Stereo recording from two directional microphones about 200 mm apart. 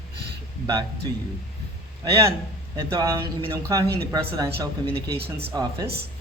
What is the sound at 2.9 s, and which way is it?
Speech, 15° right (ahead or behind).